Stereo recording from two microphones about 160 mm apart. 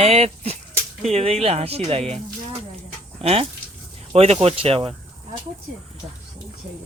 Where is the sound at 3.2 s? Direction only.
40° right (ahead or behind).